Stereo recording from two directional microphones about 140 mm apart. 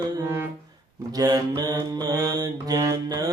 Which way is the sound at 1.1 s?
25° right (ahead or behind).